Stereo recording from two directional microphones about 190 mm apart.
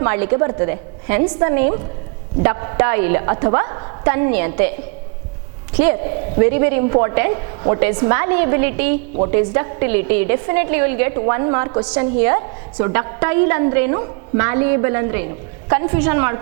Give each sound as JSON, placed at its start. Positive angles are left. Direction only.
{"t": 0.0, "sound": "a woman's voice", "side_deg": -15}
{"t": 6.4, "sound": "a woman's voice", "side_deg": -15}